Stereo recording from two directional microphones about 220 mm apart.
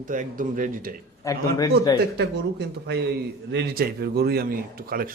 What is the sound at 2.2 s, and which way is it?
A man's voice, 50° right (ahead or behind).